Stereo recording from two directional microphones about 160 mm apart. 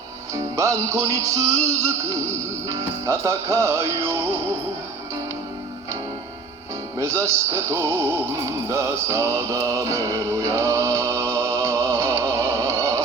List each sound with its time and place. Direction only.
0.3 s music: 20° right (ahead or behind)
1.5 s speech: 20° right (ahead or behind)
7.0 s speech: 15° right (ahead or behind)
9.7 s chant: 20° right (ahead or behind)